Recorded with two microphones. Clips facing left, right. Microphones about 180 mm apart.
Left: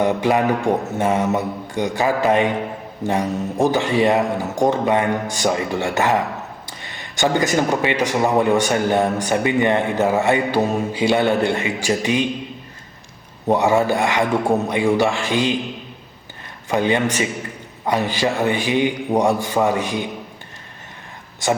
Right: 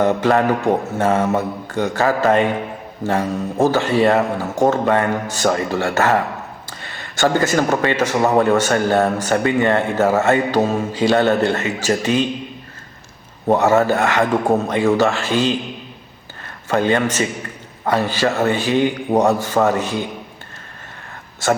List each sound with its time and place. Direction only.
0.0 s a man's voice: 15° left (ahead or behind)
13.6 s a man's voice: 15° left (ahead or behind)
16.6 s a man's voice: 15° left (ahead or behind)
21.4 s a man's voice: 15° left (ahead or behind)